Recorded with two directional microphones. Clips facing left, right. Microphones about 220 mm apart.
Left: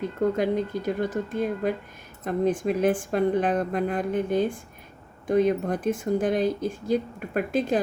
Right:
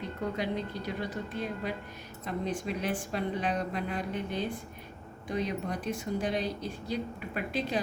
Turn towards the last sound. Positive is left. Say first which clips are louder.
# left 8 dB
turn(degrees=50)  # may be behind; listen again after turning